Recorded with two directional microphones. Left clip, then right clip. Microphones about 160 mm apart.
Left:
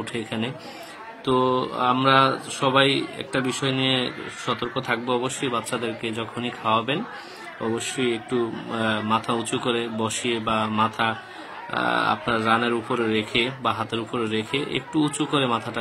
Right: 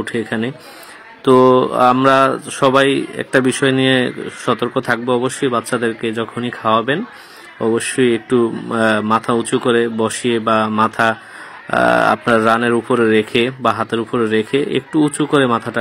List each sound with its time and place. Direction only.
0.0 s speech: 25° right (ahead or behind)
8.0 s speech: 30° right (ahead or behind)